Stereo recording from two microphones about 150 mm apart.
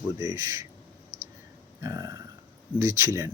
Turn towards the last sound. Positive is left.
turn(degrees=-20)  # may be behind; listen again after turning